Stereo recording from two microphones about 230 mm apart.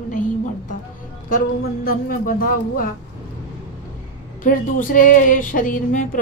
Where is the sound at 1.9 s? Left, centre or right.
Left.